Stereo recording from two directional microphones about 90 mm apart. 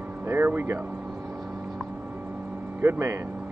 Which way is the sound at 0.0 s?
20° right (ahead or behind).